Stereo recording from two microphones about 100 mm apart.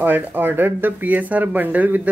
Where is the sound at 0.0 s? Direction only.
20° right (ahead or behind).